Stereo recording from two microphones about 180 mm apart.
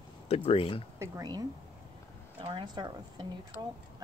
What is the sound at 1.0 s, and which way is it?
Speech, 20° right (ahead or behind).